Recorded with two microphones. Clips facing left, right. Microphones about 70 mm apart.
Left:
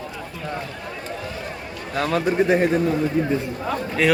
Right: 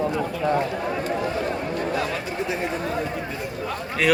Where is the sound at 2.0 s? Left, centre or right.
Left.